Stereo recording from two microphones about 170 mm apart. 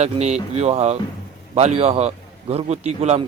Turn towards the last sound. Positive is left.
turn(degrees=-40)  # may be behind; listen again after turning